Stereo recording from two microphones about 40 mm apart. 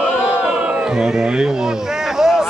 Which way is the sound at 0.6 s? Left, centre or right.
Right.